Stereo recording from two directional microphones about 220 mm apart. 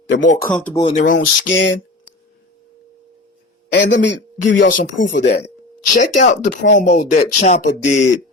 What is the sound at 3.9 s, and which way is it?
Speech, 55° left (ahead or behind).